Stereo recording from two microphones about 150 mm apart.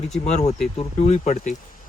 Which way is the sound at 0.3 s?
50° left (ahead or behind).